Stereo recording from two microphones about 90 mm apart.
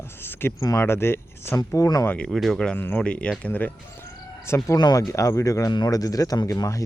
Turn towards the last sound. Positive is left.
turn(degrees=35)  # may be behind; listen again after turning